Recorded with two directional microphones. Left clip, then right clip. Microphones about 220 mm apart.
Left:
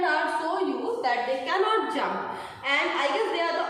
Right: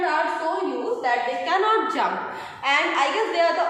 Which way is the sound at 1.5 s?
35° right (ahead or behind).